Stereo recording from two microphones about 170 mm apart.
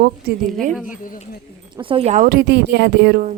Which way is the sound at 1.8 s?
30° right (ahead or behind).